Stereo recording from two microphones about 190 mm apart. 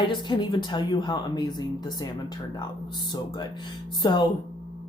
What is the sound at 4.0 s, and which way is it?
Speech, 25° left (ahead or behind).